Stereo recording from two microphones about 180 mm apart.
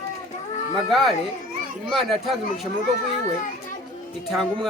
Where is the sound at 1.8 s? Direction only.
Centre (ahead or behind).